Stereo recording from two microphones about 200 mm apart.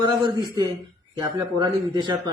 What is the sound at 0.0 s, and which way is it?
A man's voice, 20° right (ahead or behind).